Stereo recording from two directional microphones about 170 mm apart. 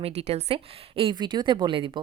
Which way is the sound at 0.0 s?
35° right (ahead or behind).